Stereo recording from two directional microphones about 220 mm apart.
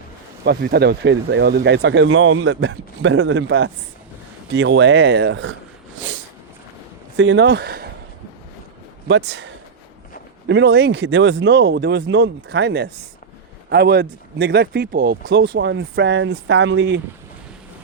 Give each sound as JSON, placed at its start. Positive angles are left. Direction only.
{"t": 0.4, "sound": "speech", "side_deg": -45}
{"t": 7.2, "sound": "speech", "side_deg": -55}
{"t": 9.0, "sound": "speech", "side_deg": -55}